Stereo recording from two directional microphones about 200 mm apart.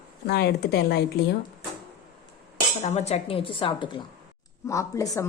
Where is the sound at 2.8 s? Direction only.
35° left (ahead or behind).